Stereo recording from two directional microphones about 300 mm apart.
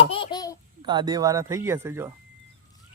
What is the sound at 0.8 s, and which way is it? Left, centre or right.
Speech, centre.